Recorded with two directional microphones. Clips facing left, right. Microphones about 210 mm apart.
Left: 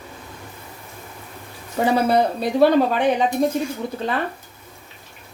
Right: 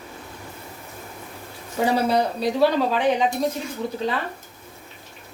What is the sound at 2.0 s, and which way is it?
Speech, 55° left (ahead or behind).